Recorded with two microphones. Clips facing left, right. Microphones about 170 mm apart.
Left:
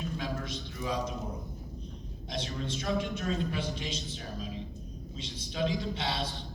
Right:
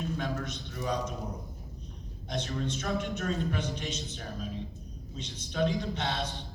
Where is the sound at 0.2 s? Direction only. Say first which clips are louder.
Right 1 dB; 45° right (ahead or behind).